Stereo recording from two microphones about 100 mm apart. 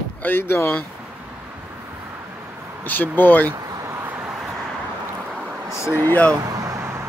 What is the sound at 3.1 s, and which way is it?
Speech, 20° left (ahead or behind).